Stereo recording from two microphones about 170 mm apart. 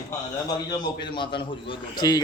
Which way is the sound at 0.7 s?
25° left (ahead or behind).